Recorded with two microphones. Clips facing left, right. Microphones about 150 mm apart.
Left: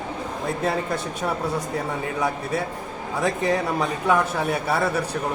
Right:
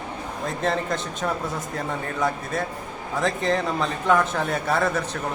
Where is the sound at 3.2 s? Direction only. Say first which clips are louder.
Left 1 dB; 10° left (ahead or behind).